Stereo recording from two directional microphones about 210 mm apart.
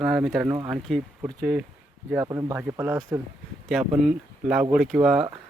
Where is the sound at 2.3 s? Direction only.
15° right (ahead or behind).